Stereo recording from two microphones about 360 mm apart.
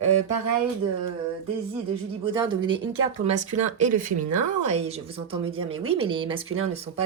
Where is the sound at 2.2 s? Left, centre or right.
Centre.